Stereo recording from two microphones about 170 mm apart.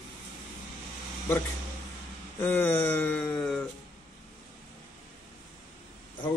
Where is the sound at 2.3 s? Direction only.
10° left (ahead or behind).